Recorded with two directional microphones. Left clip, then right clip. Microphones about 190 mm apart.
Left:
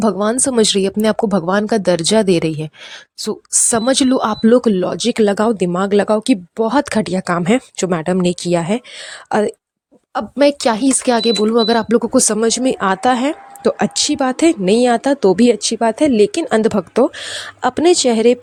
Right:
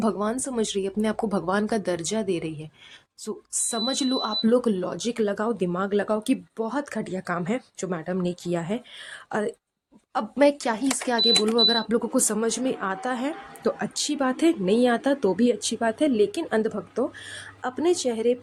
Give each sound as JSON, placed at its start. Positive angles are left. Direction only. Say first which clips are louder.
{"t": 0.0, "sound": "speech", "louder": "left 10 dB", "side_deg": 40}